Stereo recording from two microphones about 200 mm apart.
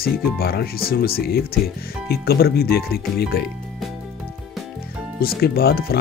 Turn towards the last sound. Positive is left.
turn(degrees=50)  # may be behind; listen again after turning